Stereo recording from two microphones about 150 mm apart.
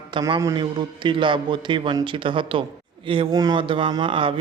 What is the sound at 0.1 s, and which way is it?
Speech, 30° right (ahead or behind).